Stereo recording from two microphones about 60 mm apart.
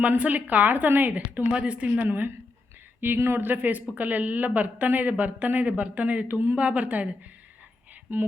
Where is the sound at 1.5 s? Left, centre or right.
Right.